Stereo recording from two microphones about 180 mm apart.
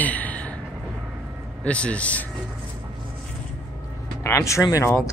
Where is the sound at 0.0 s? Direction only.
10° left (ahead or behind).